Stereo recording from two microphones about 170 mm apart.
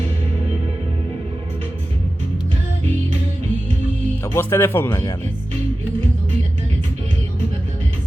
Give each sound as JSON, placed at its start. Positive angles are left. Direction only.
{"t": 4.2, "sound": "speech", "side_deg": 15}